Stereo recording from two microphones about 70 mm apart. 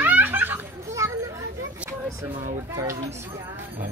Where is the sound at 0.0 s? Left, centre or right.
Right.